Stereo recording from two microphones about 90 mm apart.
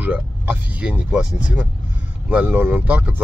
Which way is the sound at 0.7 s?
15° right (ahead or behind).